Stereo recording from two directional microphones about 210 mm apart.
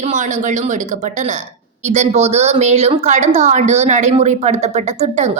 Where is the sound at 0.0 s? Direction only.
35° right (ahead or behind).